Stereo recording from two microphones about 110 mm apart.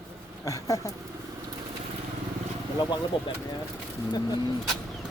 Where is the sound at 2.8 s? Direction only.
40° left (ahead or behind).